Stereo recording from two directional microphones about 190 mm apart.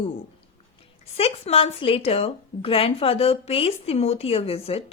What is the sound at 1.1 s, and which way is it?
Speech, 30° left (ahead or behind).